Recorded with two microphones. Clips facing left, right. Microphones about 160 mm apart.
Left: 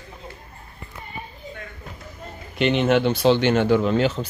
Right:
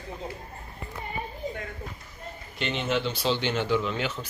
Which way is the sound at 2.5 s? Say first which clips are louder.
Left 10 dB; 65° left (ahead or behind).